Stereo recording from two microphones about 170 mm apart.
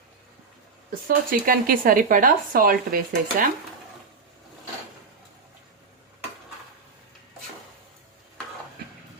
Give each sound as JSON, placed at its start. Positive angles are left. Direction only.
{"t": 1.0, "sound": "speech", "side_deg": -55}